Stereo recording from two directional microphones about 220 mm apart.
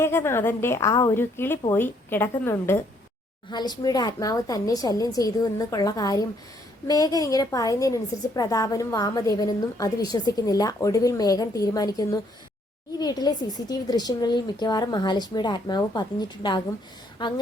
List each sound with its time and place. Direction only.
0.0 s a woman's voice: 10° left (ahead or behind)